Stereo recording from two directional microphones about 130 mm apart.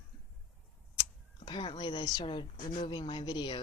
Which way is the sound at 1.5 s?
35° left (ahead or behind).